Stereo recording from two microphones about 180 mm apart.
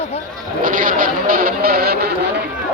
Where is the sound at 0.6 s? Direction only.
50° right (ahead or behind).